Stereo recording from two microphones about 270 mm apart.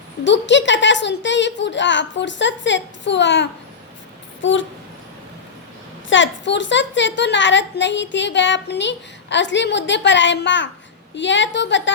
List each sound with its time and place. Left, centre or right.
0.3 s a woman's voice: left
4.4 s a sound: left
6.1 s a woman's voice: left